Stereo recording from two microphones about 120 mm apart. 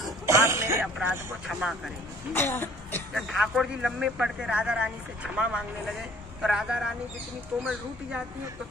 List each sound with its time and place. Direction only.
0.3 s music: 20° right (ahead or behind)
1.5 s speech: 5° right (ahead or behind)
2.3 s throat clearing: 20° left (ahead or behind)
3.2 s speech: centre (ahead or behind)